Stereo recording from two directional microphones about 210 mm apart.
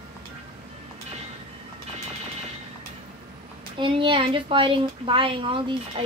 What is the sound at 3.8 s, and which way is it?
Speech, 25° right (ahead or behind).